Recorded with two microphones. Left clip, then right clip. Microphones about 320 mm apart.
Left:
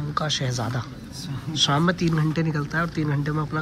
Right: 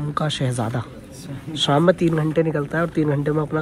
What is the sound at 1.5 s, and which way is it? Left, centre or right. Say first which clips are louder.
Speech: right 5 dB; centre.